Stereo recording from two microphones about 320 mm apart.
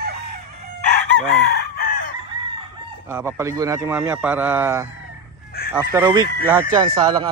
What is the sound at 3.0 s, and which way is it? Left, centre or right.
Speech, centre.